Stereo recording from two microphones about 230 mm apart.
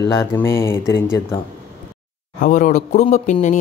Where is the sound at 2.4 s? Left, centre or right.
Left.